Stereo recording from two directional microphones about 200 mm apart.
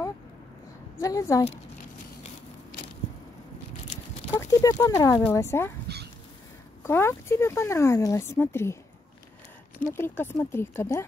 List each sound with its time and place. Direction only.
1.0 s speech: 15° left (ahead or behind)
4.4 s speech: 15° left (ahead or behind)
5.9 s a sound: 55° right (ahead or behind)
6.8 s speech: 10° left (ahead or behind)
9.9 s speech: 10° left (ahead or behind)